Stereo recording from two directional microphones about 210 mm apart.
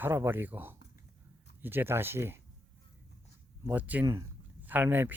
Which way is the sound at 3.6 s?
10° right (ahead or behind).